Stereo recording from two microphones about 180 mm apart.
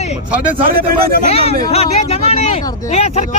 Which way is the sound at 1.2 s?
35° left (ahead or behind).